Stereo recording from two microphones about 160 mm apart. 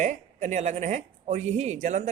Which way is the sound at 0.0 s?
50° right (ahead or behind).